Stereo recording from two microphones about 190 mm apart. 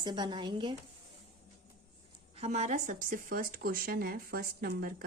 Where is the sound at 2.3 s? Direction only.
35° right (ahead or behind).